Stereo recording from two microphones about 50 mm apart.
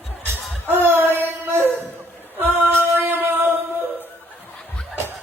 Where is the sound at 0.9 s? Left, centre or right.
Right.